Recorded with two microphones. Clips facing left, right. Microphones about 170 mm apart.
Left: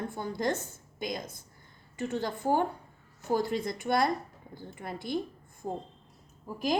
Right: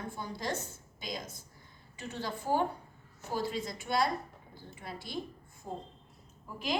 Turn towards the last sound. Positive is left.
turn(degrees=40)  # may be behind; listen again after turning